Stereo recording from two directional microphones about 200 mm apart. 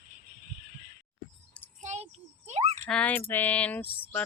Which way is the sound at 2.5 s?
30° right (ahead or behind).